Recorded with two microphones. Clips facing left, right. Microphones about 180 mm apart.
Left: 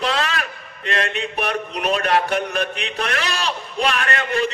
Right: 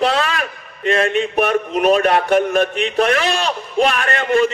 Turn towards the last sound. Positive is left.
turn(degrees=-45)  # may be behind; listen again after turning